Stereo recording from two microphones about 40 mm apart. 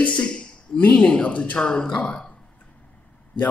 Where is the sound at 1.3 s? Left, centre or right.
Left.